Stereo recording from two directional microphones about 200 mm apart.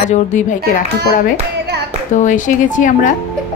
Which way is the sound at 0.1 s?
35° left (ahead or behind).